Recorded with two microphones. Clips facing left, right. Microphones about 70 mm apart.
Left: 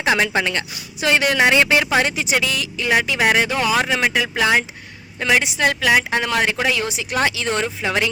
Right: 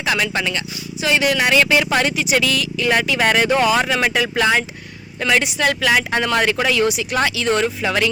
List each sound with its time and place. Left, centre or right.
0.0 s speech: left
3.2 s speech: centre
3.6 s speech: centre
6.8 s speech: left
7.6 s speech: centre